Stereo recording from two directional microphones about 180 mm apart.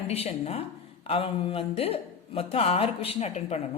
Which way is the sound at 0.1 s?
35° left (ahead or behind).